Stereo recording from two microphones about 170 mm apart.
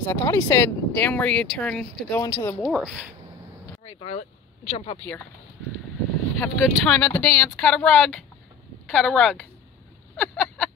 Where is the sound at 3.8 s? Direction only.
35° left (ahead or behind).